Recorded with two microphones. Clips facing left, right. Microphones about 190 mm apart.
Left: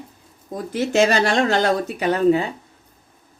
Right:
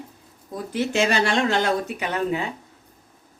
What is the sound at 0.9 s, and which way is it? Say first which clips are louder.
Speech: left 5 dB; 40° left (ahead or behind).